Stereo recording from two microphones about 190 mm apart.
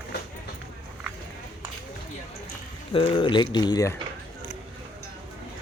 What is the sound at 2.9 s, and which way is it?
Speech, 30° left (ahead or behind).